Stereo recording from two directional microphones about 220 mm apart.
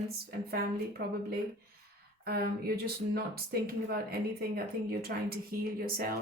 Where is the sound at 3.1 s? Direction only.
45° right (ahead or behind).